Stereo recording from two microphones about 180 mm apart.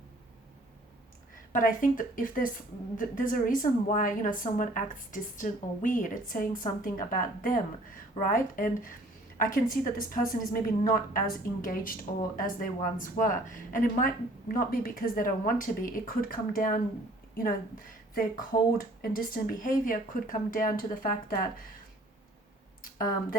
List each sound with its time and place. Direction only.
1.5 s a woman's voice: 50° left (ahead or behind)
22.8 s speech: 50° left (ahead or behind)